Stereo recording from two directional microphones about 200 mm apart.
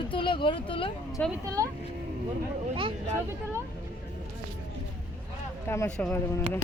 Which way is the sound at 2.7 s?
25° right (ahead or behind).